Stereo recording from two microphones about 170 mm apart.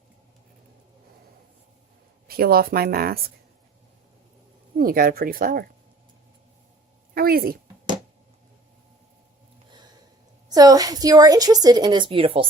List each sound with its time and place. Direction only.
2.2 s speech: 65° right (ahead or behind)
4.8 s speech: 55° right (ahead or behind)
7.1 s speech: 60° right (ahead or behind)
10.5 s a woman's voice: 20° right (ahead or behind)